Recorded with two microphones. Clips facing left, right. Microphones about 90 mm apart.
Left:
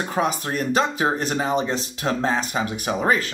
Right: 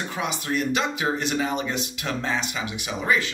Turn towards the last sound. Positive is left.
turn(degrees=45)  # may be behind; listen again after turning